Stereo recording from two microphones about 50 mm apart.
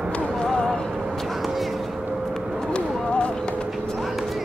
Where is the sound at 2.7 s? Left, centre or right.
Left.